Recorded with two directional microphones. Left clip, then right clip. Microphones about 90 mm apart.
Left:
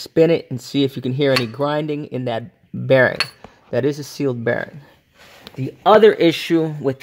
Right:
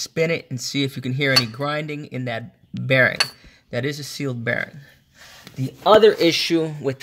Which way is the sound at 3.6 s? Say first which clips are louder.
Left 6 dB; 60° left (ahead or behind).